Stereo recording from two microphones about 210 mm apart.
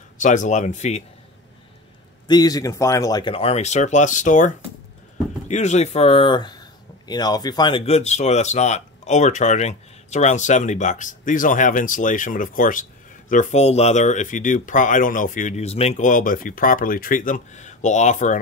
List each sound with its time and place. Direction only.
0.2 s speech: 35° left (ahead or behind)
2.2 s speech: 20° left (ahead or behind); by 4.5 s 35° left (ahead or behind)
5.5 s speech: 35° left (ahead or behind)